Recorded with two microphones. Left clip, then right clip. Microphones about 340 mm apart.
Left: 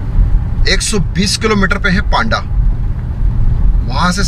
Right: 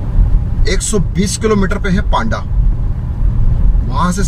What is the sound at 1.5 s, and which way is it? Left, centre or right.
Speech, centre.